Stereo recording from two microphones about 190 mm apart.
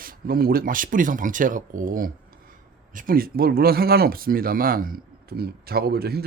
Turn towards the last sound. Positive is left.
turn(degrees=-55)  # may be behind; listen again after turning